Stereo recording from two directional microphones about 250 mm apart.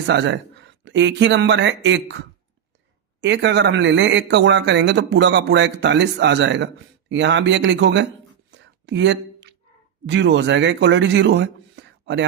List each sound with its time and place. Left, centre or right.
0.1 s speech: right
8.4 s whispering: right
10.1 s a man's voice: right